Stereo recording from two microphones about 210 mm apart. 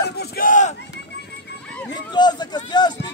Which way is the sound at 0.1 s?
50° left (ahead or behind).